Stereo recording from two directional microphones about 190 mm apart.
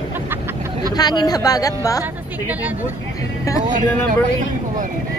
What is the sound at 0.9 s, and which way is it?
A woman's voice, 20° left (ahead or behind).